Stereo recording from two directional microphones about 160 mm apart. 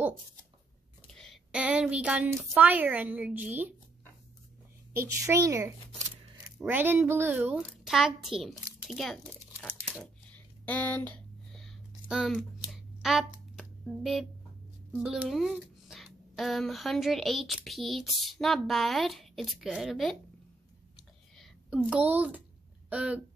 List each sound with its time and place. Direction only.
1.1 s a woman's voice: centre (ahead or behind)
5.0 s a woman's voice: 20° right (ahead or behind)
5.9 s a sound: 45° right (ahead or behind)
6.6 s a woman's voice: 10° right (ahead or behind)
7.5 s speech: centre (ahead or behind)
10.3 s a sound: 10° left (ahead or behind)
15.0 s speech: 5° right (ahead or behind)
21.4 s a woman's voice: centre (ahead or behind)